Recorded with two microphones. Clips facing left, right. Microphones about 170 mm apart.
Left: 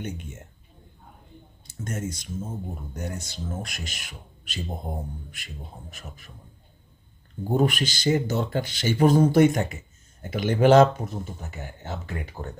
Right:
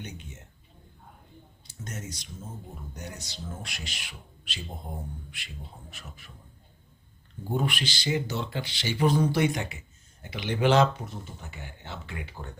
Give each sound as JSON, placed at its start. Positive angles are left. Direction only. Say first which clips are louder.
{"t": 0.0, "sound": "speech", "louder": "left 7 dB", "side_deg": 50}
{"t": 1.6, "sound": "speech", "louder": "left 8 dB", "side_deg": 50}
{"t": 7.5, "sound": "speech", "louder": "left 6 dB", "side_deg": 45}